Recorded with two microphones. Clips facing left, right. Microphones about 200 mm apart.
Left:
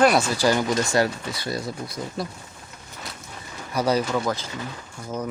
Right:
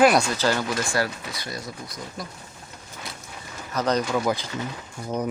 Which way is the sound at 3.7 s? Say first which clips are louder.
Left 1 dB; 10° left (ahead or behind).